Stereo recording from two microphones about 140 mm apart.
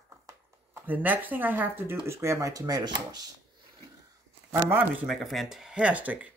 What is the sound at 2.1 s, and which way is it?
Speech, 20° right (ahead or behind).